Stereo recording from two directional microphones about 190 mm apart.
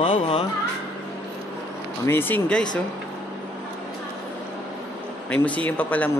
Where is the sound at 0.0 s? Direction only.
30° left (ahead or behind).